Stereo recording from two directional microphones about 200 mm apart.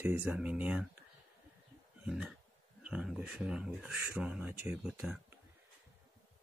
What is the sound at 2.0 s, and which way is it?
Speech, 5° right (ahead or behind).